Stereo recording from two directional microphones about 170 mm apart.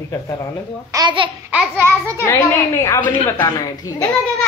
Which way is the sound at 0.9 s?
25° right (ahead or behind).